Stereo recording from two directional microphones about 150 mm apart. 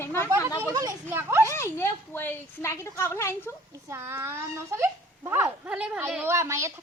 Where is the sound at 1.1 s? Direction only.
15° right (ahead or behind).